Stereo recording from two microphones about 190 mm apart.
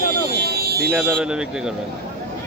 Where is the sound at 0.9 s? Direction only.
5° right (ahead or behind).